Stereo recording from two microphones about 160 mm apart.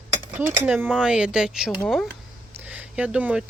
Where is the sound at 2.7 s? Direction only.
10° right (ahead or behind).